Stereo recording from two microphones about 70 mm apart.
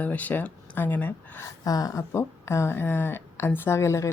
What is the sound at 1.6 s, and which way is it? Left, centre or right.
Speech, left.